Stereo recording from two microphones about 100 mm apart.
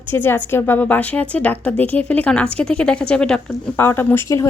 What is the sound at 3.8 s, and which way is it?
Speech, 20° left (ahead or behind).